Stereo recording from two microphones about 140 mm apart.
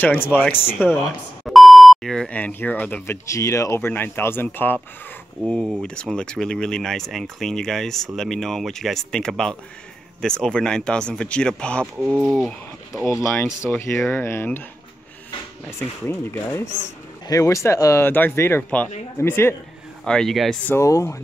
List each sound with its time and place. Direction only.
0.0 s speech: 15° left (ahead or behind)
1.4 s speech: centre (ahead or behind)
11.8 s speech: 15° right (ahead or behind)
12.3 s speech: centre (ahead or behind)
13.0 s speech: 20° left (ahead or behind)
16.1 s speech: 15° left (ahead or behind)
20.1 s speech: 5° left (ahead or behind)
20.7 s speech: 20° left (ahead or behind)